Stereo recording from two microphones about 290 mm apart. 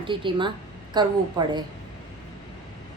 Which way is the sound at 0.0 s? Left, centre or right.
Centre.